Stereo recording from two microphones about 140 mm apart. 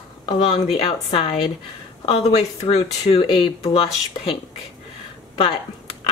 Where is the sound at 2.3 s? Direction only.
45° left (ahead or behind).